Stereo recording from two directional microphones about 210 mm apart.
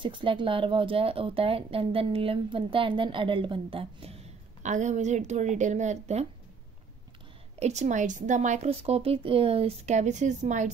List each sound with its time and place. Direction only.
0.0 s a woman's voice: 25° right (ahead or behind)
7.5 s speech: 30° right (ahead or behind)